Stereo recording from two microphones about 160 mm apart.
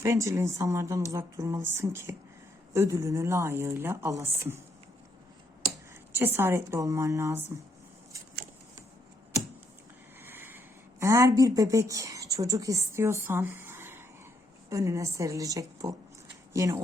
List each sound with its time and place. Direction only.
0.0 s a woman's voice: 20° right (ahead or behind)
5.9 s a woman's voice: 15° right (ahead or behind)
10.2 s a sound: 15° right (ahead or behind)
11.0 s a woman's voice: 20° right (ahead or behind)